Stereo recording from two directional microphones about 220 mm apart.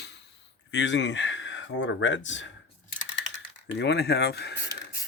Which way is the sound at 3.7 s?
50° left (ahead or behind).